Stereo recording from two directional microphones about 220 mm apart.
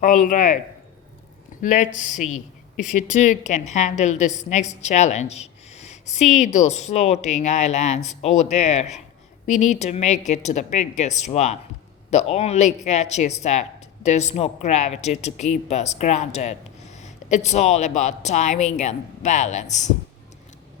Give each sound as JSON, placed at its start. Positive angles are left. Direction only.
{"t": 0.0, "sound": "speech", "side_deg": 35}
{"t": 1.6, "sound": "speech", "side_deg": 35}